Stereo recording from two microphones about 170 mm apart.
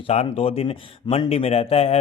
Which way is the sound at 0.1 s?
35° left (ahead or behind).